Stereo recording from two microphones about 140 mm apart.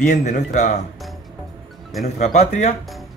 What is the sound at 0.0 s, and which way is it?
Speech, 65° left (ahead or behind).